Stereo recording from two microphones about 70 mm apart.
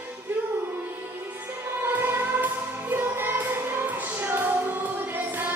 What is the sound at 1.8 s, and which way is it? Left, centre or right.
Music, right.